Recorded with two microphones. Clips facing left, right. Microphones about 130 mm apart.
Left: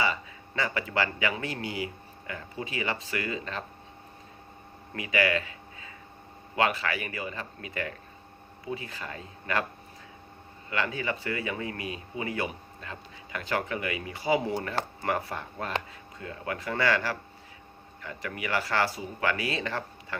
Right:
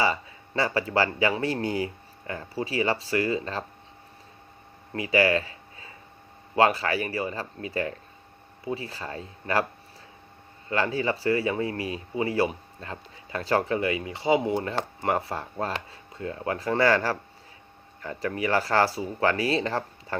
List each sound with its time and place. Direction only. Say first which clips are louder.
0.0 s speech: right 4 dB; 35° right (ahead or behind)
4.9 s speech: right 5 dB; 30° right (ahead or behind)
10.7 s speech: right 5 dB; 35° right (ahead or behind)